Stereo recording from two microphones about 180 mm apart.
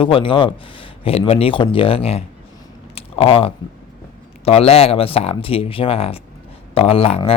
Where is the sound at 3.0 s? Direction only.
30° left (ahead or behind).